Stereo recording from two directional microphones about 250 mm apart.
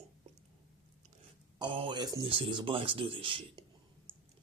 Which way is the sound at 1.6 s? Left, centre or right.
Centre.